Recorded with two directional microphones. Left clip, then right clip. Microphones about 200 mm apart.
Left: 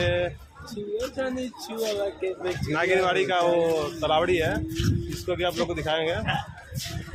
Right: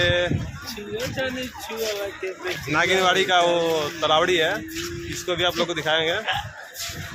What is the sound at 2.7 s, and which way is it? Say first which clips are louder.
Speech: right 4 dB; 15° right (ahead or behind).